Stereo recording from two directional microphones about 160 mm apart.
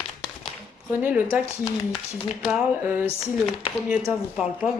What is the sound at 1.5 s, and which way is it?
Speech, 15° left (ahead or behind).